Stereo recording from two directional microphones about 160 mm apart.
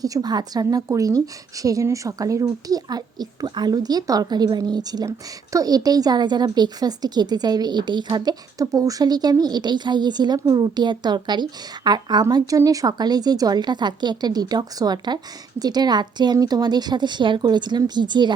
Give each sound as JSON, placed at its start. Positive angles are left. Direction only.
{"t": 0.0, "sound": "a woman's voice", "side_deg": -25}